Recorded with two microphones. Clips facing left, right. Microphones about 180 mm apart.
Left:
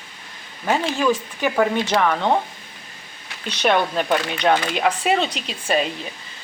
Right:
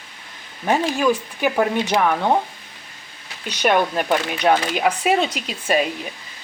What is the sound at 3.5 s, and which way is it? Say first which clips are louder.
A woman's voice: right 1 dB; 10° right (ahead or behind).